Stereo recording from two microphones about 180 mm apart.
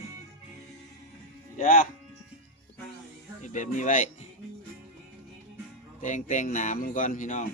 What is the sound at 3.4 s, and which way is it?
Speech, 45° left (ahead or behind).